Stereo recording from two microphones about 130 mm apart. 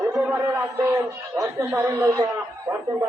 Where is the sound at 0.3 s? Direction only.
20° right (ahead or behind).